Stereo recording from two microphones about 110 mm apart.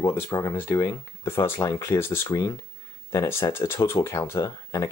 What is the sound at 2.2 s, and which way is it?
Speech, 35° left (ahead or behind).